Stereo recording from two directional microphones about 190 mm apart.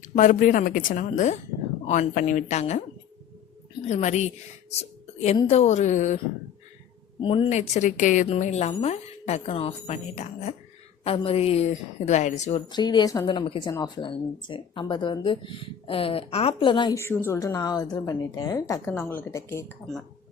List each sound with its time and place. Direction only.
0.2 s a woman's voice: 45° left (ahead or behind)
3.8 s speech: 35° left (ahead or behind)
4.8 s a sound: 35° left (ahead or behind)
5.5 s speech: 35° left (ahead or behind)
7.2 s a woman's voice: 25° left (ahead or behind)
17.0 s a woman's voice: 10° left (ahead or behind)